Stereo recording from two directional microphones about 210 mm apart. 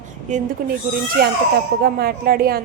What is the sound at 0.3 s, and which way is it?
Speech, 35° right (ahead or behind).